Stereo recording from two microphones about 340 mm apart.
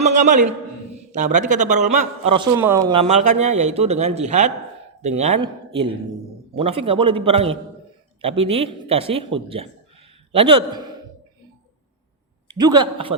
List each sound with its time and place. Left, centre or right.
0.0 s a man's voice: right
2.4 s a man's voice: centre
12.7 s a man's voice: centre